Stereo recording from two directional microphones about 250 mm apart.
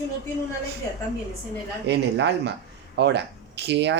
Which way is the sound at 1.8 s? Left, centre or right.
Right.